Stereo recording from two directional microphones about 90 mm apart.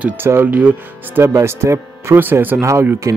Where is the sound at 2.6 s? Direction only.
30° right (ahead or behind).